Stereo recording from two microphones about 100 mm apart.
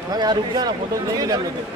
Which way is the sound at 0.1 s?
45° right (ahead or behind).